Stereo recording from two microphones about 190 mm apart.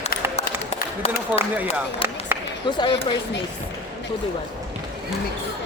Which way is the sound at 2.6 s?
25° left (ahead or behind).